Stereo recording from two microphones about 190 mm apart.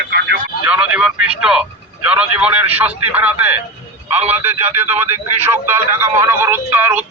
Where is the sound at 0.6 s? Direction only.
5° right (ahead or behind).